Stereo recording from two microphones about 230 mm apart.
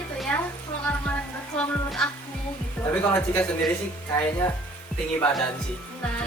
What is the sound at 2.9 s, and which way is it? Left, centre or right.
Speech, centre.